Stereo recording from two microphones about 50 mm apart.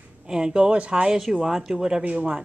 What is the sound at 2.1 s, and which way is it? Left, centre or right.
Speech, right.